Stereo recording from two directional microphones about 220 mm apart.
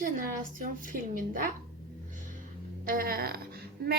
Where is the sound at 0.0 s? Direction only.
40° right (ahead or behind).